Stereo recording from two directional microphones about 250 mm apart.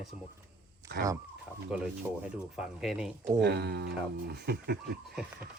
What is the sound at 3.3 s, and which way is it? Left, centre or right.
Speech, right.